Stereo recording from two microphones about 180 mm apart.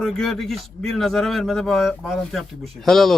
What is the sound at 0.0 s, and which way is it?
A man's voice, 5° left (ahead or behind).